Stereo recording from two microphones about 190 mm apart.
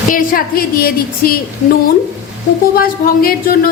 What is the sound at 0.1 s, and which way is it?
A woman's voice, 45° left (ahead or behind).